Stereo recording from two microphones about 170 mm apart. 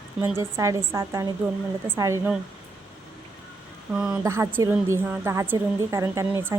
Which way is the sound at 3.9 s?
5° right (ahead or behind).